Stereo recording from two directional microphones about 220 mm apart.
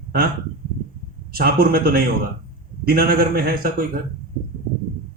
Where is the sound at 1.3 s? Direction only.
45° right (ahead or behind).